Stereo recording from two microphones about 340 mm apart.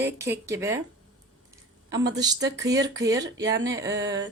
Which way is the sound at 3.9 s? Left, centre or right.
Right.